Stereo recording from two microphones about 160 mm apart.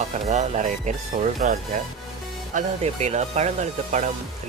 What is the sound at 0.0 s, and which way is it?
Speech, 45° right (ahead or behind).